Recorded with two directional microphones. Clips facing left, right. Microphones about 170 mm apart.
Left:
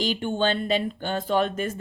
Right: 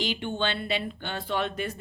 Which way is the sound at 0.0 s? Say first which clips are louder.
Left 5 dB; 45° left (ahead or behind).